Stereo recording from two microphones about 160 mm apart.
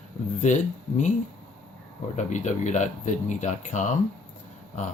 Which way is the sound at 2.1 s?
50° left (ahead or behind).